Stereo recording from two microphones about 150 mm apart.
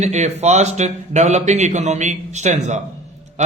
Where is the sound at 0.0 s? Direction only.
50° right (ahead or behind).